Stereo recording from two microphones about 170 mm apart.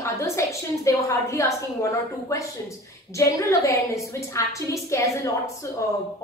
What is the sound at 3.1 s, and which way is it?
A woman's voice, 20° left (ahead or behind).